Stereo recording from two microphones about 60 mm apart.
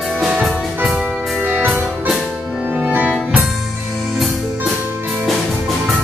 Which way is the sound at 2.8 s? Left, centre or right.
Right.